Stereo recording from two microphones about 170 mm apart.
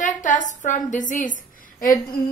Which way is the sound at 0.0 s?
50° left (ahead or behind).